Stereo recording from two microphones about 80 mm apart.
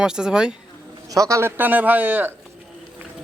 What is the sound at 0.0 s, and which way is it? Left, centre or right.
Speech, centre.